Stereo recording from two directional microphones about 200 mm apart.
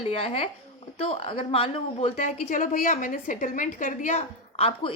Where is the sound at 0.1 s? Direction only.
30° left (ahead or behind).